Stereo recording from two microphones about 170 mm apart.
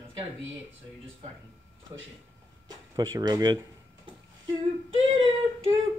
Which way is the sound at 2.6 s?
25° right (ahead or behind).